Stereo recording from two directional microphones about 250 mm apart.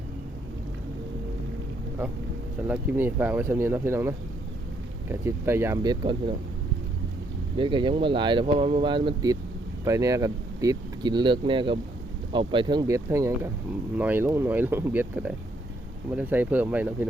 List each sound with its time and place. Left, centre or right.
2.6 s speech: centre
7.5 s speech: centre